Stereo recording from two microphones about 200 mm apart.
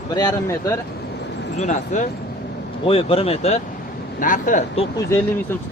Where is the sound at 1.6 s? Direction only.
40° left (ahead or behind).